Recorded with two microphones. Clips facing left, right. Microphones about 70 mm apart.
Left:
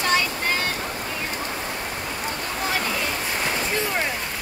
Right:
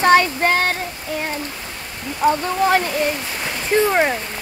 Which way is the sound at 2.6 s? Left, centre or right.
Right.